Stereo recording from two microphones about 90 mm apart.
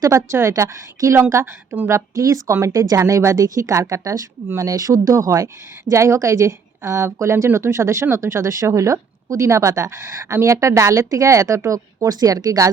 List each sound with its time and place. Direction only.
0.0 s speech: 40° right (ahead or behind)
0.3 s speech: 30° right (ahead or behind)